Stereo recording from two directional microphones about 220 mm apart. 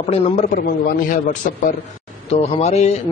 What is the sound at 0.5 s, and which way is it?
Speech, 40° left (ahead or behind).